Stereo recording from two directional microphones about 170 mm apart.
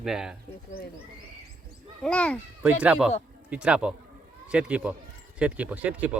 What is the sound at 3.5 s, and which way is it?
Music, 5° right (ahead or behind).